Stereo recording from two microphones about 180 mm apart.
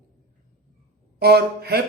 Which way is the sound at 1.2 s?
60° right (ahead or behind).